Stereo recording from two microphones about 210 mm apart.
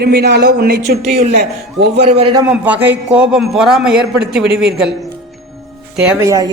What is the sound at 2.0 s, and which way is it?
Speech, 25° right (ahead or behind).